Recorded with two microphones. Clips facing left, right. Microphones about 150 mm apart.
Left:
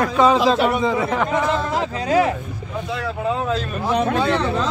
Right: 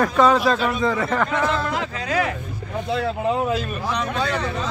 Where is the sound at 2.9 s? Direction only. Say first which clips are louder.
Right 2 dB; 20° right (ahead or behind).